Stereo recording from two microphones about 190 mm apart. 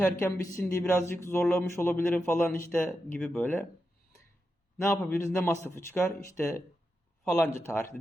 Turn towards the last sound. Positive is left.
turn(degrees=15)  # may be behind; listen again after turning